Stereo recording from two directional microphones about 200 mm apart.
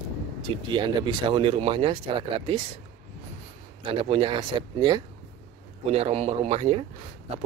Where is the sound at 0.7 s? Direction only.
25° right (ahead or behind).